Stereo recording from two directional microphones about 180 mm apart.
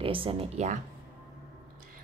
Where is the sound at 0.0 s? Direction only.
30° right (ahead or behind).